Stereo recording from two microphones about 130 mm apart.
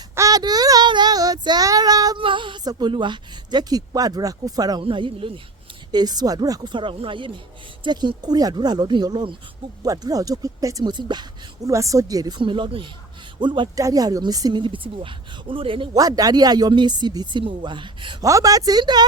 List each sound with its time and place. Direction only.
0.2 s child singing: 30° right (ahead or behind)
4.8 s speech: 40° right (ahead or behind)
12.4 s speech: 40° right (ahead or behind)
16.0 s speech: 30° right (ahead or behind)